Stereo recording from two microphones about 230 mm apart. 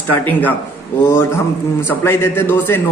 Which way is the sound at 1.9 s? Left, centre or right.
Centre.